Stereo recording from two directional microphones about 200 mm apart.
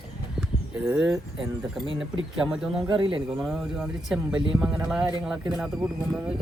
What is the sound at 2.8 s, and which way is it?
Speech, 25° right (ahead or behind).